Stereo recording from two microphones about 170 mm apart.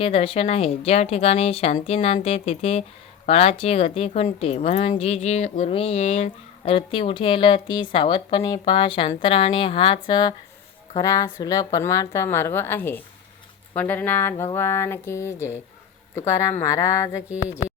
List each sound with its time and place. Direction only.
0.0 s a woman's voice: 35° left (ahead or behind); by 17.2 s 20° left (ahead or behind)